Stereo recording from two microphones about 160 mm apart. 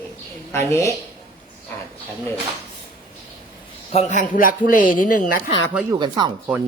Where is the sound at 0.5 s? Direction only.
20° left (ahead or behind).